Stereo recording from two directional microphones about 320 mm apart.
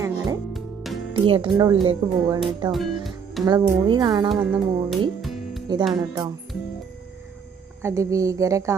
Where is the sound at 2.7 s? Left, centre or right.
Centre.